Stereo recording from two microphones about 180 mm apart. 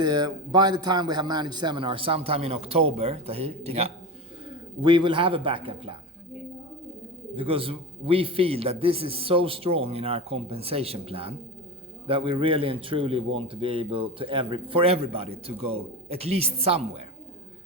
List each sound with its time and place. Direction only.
0.0 s a man's voice: 25° right (ahead or behind)
7.3 s a man's voice: 30° right (ahead or behind)